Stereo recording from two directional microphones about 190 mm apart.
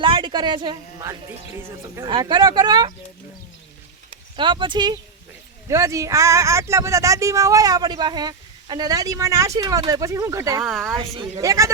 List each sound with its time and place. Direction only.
0.0 s a woman's voice: 25° right (ahead or behind)
4.1 s speech: 25° right (ahead or behind)
10.6 s speech: centre (ahead or behind)
10.9 s speech: 30° right (ahead or behind)
11.3 s speech: 15° right (ahead or behind)